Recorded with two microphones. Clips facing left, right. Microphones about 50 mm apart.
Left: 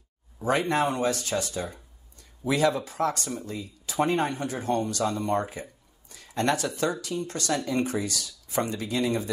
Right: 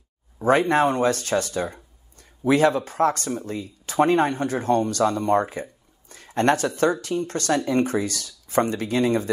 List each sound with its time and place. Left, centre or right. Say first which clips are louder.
0.4 s speech: right 6 dB; right